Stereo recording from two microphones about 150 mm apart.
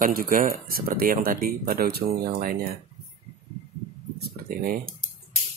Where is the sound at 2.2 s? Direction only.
75° right (ahead or behind).